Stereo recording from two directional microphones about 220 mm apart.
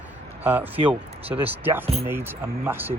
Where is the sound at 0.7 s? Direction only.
25° right (ahead or behind).